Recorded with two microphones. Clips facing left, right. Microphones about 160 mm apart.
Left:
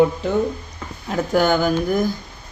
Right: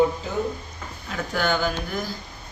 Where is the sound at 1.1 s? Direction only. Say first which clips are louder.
Left 7 dB; 45° left (ahead or behind).